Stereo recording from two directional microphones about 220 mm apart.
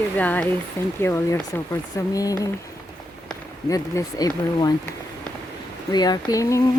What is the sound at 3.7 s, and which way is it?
Speech, 15° left (ahead or behind).